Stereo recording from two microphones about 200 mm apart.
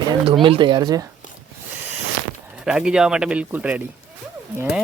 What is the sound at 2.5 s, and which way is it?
Speech, 5° right (ahead or behind).